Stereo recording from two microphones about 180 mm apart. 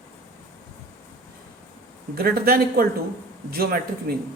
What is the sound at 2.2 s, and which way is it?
A woman's voice, 55° right (ahead or behind).